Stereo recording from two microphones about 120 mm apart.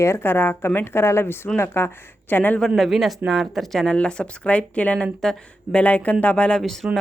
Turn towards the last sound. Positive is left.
turn(degrees=0)  # may be behind; listen again after turning